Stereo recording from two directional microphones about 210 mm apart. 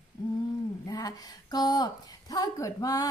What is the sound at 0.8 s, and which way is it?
A woman's voice, 20° left (ahead or behind).